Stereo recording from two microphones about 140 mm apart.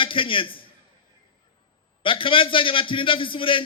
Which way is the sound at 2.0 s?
40° left (ahead or behind).